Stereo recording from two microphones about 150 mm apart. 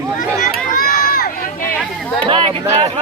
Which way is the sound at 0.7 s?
70° left (ahead or behind).